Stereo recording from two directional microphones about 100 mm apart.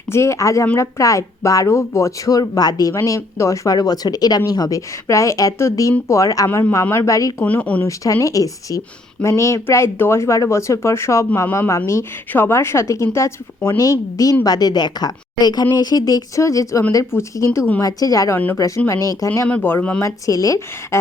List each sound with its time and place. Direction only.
0.1 s speech: 30° left (ahead or behind)
2.9 s speech: 30° left (ahead or behind)
7.4 s speech: 15° left (ahead or behind)
7.9 s speech: 35° left (ahead or behind)
14.4 s a woman's voice: 40° left (ahead or behind)
19.5 s speech: 15° left (ahead or behind)
20.0 s speech: 35° left (ahead or behind)